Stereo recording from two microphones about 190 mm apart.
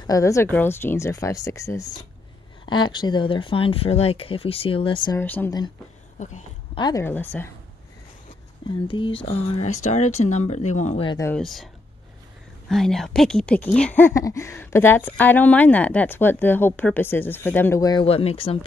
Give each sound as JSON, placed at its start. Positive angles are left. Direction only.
{"t": 0.0, "sound": "speech", "side_deg": 15}
{"t": 5.1, "sound": "speech", "side_deg": 10}
{"t": 6.1, "sound": "a sound", "side_deg": 40}
{"t": 6.8, "sound": "speech", "side_deg": 15}
{"t": 8.6, "sound": "speech", "side_deg": 25}
{"t": 11.3, "sound": "speech", "side_deg": 0}
{"t": 18.0, "sound": "speech", "side_deg": 30}